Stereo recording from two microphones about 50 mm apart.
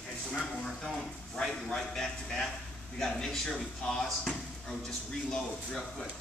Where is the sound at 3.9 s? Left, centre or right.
Centre.